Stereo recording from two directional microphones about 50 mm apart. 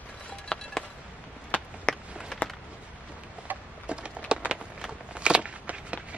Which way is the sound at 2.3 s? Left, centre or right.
Centre.